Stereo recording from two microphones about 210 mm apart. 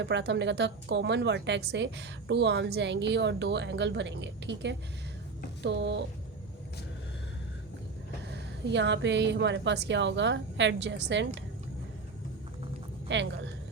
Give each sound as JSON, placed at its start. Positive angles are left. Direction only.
{"t": 0.0, "sound": "a woman's voice", "side_deg": -55}
{"t": 8.3, "sound": "a woman's voice", "side_deg": -55}
{"t": 13.1, "sound": "a woman's voice", "side_deg": -60}